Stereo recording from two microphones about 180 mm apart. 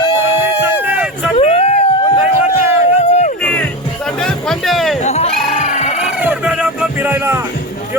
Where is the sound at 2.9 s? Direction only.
35° left (ahead or behind).